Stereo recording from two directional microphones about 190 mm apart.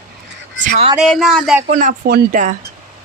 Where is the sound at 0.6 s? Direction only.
40° right (ahead or behind).